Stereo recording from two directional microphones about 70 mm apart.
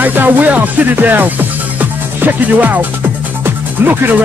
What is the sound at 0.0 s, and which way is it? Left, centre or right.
Speech, right.